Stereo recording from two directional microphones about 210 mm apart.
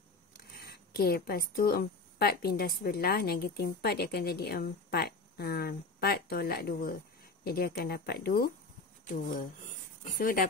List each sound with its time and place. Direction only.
0.6 s a woman's voice: 50° left (ahead or behind)
10.1 s a woman's voice: 45° left (ahead or behind)